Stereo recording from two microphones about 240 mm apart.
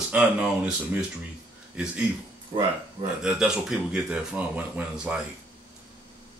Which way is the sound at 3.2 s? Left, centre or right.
Centre.